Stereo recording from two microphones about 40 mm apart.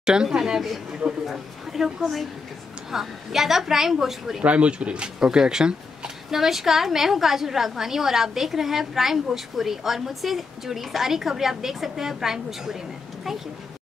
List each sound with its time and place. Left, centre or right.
0.0 s speech: centre
1.2 s a woman's voice: centre
2.9 s speech: centre
4.4 s speech: right; by 12.7 s centre